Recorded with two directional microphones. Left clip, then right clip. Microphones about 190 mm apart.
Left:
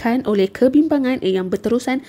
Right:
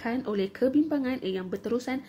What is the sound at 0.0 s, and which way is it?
A woman's voice, 45° left (ahead or behind).